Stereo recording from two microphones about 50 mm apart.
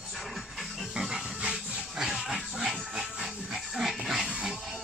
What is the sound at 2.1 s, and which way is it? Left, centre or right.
Dog, centre.